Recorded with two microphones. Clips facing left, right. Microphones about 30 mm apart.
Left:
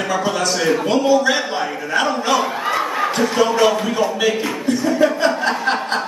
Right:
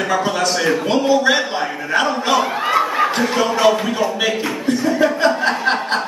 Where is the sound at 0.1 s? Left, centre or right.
Centre.